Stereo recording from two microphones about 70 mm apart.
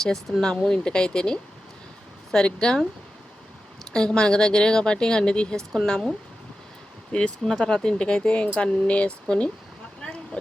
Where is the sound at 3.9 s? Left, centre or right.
Centre.